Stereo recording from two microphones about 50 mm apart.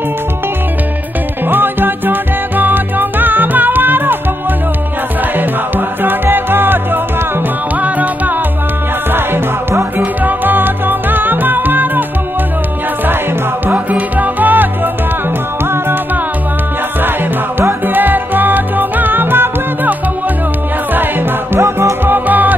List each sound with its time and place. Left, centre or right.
1.5 s music: right
5.4 s music: right
7.8 s music: right
9.1 s music: right
13.8 s music: right
17.8 s music: right
21.5 s music: right
22.0 s music: right